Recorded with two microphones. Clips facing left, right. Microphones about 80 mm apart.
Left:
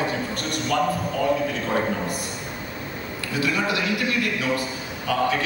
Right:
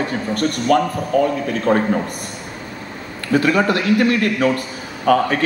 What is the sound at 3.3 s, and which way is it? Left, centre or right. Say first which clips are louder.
A man's voice: right 9 dB; right.